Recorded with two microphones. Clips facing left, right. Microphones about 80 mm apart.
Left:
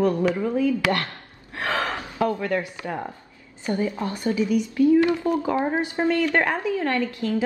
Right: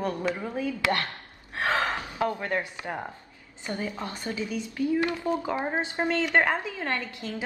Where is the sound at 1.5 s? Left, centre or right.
Right.